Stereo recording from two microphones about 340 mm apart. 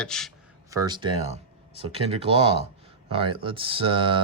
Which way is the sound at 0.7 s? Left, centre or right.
Centre.